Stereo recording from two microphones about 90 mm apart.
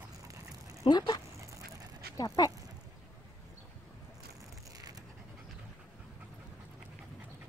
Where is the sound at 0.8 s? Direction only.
50° left (ahead or behind).